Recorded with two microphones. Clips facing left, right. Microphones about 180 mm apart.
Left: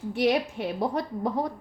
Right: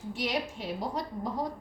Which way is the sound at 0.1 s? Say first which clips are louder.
Left 8 dB; 60° left (ahead or behind).